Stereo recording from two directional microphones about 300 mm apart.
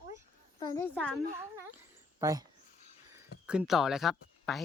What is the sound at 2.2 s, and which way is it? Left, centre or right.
Speech, centre.